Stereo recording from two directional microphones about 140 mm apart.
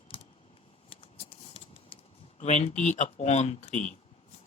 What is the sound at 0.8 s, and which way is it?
Scissors, 40° left (ahead or behind).